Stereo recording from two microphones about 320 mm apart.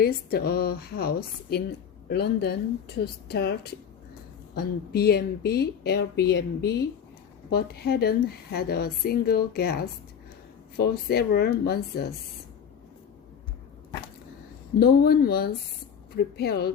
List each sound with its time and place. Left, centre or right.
0.0 s a woman's voice: left
14.8 s a woman's voice: left